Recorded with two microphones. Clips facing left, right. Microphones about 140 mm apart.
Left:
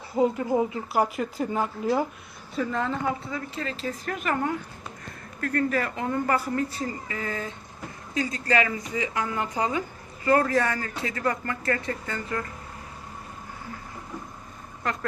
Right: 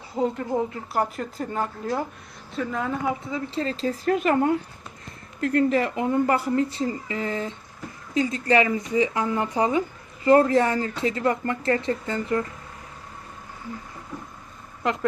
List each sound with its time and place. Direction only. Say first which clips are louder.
0.2 s a woman's voice: left 2 dB; 5° left (ahead or behind)
2.6 s speech: even; 5° right (ahead or behind)
3.3 s speech: right 5 dB; 30° right (ahead or behind)